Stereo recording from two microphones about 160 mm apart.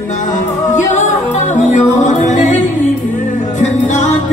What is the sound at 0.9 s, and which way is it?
Music, 50° left (ahead or behind).